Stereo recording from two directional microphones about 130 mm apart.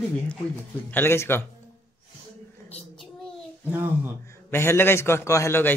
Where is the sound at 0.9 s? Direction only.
15° left (ahead or behind).